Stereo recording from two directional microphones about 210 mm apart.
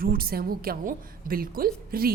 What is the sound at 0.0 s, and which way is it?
A woman's voice, 45° right (ahead or behind).